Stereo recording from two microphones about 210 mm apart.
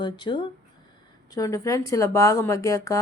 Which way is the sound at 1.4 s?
15° left (ahead or behind).